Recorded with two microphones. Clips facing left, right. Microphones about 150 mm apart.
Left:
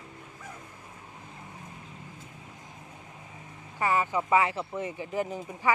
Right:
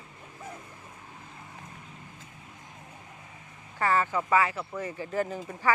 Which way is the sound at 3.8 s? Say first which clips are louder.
Even; 15° left (ahead or behind).